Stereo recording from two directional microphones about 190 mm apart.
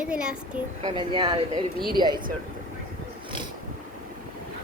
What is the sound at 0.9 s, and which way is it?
Speech, 25° right (ahead or behind).